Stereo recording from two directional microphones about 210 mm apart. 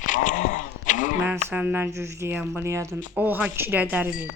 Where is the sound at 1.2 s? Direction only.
10° right (ahead or behind).